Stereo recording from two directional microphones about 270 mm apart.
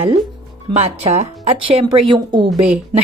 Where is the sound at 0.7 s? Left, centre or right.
Right.